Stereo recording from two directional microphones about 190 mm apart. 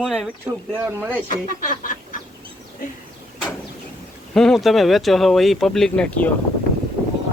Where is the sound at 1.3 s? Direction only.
45° left (ahead or behind).